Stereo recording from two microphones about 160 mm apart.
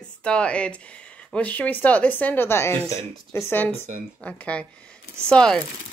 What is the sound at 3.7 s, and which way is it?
Speech, 45° right (ahead or behind).